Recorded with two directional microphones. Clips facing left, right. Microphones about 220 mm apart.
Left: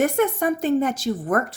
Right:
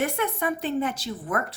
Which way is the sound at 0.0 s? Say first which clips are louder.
Left 7 dB; 45° left (ahead or behind).